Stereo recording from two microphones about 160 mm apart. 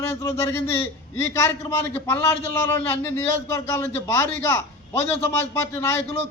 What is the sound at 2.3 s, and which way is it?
A man's voice, 15° left (ahead or behind).